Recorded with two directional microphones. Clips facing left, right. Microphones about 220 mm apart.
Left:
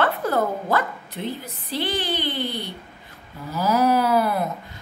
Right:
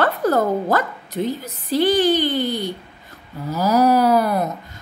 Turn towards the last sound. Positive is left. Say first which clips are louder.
# right 4 dB
turn(degrees=-40)  # may be behind; listen again after turning